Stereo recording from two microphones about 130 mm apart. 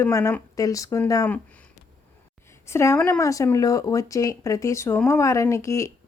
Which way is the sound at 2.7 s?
20° left (ahead or behind).